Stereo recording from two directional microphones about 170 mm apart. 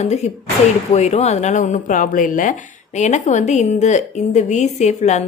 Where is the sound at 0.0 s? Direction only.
40° left (ahead or behind).